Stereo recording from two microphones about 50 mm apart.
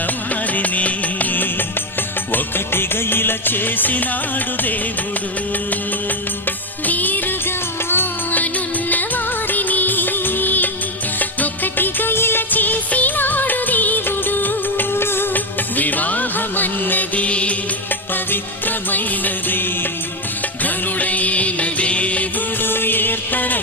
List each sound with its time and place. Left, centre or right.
0.5 s music: left
6.8 s music: left
18.1 s music: left
20.7 s music: left
22.6 s music: left